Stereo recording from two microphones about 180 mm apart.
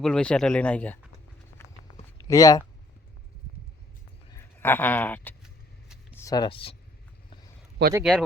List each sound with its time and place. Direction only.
0.0 s speech: 5° left (ahead or behind)
1.6 s a sound: 15° left (ahead or behind)
2.2 s speech: 20° left (ahead or behind)
4.3 s speech: 15° left (ahead or behind)
6.1 s speech: 20° left (ahead or behind)
7.8 s speech: 70° right (ahead or behind)